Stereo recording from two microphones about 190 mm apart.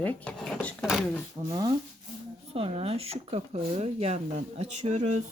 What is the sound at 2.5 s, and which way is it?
Speech, 30° right (ahead or behind).